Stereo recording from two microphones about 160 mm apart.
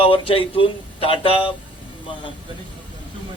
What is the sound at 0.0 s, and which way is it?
A man's voice, 35° left (ahead or behind).